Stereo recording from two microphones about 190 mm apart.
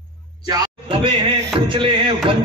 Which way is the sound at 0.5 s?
25° right (ahead or behind).